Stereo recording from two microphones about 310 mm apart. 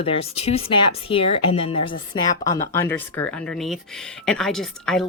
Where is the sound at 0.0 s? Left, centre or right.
Centre.